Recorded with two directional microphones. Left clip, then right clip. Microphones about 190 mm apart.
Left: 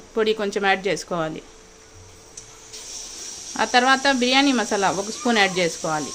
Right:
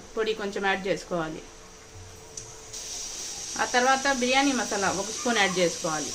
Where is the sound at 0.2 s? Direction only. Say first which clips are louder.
Left 7 dB; 60° left (ahead or behind).